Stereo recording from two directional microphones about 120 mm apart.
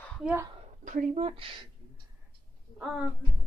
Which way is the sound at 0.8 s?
90° right.